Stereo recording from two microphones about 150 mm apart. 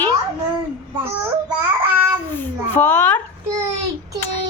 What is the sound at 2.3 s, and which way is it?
Speech, 15° left (ahead or behind).